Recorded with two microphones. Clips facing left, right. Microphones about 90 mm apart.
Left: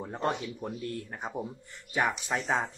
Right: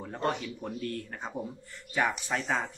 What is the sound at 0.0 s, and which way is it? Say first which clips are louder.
Speech: even; 20° left (ahead or behind).